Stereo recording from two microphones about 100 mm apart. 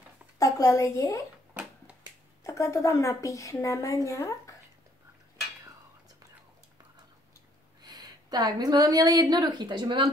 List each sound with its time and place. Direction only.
0.4 s a woman's voice: 35° left (ahead or behind)
2.4 s a woman's voice: 30° left (ahead or behind)
7.8 s speech: 45° right (ahead or behind)